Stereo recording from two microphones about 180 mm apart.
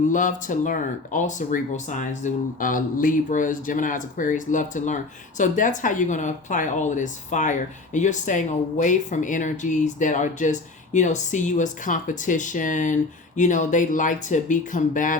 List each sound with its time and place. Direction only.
0.1 s speech: 45° left (ahead or behind)